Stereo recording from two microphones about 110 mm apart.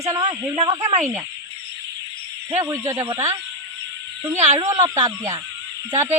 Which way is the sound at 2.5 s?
30° right (ahead or behind).